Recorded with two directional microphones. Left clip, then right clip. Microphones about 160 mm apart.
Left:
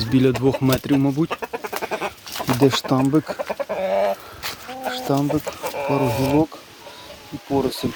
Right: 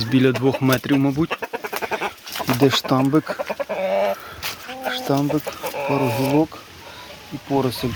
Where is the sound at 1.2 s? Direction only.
15° left (ahead or behind).